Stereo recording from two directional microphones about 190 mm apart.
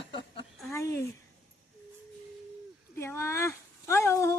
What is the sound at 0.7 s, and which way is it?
Speech, 15° left (ahead or behind).